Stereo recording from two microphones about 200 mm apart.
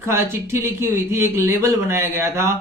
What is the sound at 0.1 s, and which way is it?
Speech, 15° right (ahead or behind).